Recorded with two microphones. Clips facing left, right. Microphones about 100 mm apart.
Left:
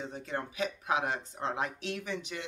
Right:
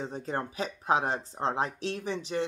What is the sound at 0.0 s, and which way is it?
Speech, 35° right (ahead or behind).